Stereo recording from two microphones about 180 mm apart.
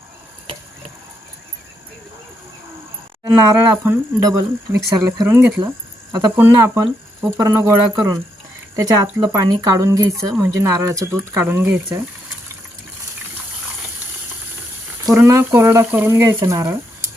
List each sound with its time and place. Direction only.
3.2 s speech: 15° right (ahead or behind)
5.0 s speech: 20° right (ahead or behind)
15.0 s speech: 15° right (ahead or behind)